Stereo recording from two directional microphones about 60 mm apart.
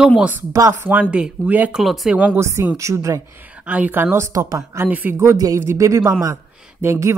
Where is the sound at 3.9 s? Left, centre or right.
Right.